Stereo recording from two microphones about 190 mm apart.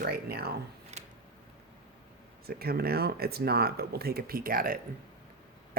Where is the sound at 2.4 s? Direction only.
55° right (ahead or behind).